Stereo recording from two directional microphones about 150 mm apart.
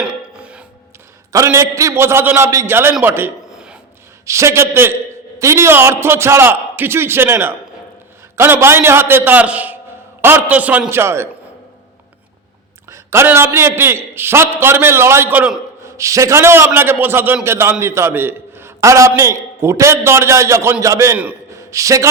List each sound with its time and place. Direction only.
0.0 s music: 5° right (ahead or behind)
1.3 s a man's voice: 20° right (ahead or behind)
3.0 s a sound: 15° right (ahead or behind)
4.3 s a man's voice: 20° right (ahead or behind)
12.9 s a man's voice: 15° right (ahead or behind)
21.2 s a sound: 10° right (ahead or behind)
21.7 s a man's voice: 20° right (ahead or behind)